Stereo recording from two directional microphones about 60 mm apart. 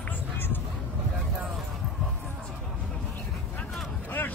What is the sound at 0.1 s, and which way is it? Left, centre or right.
Vehicle, left.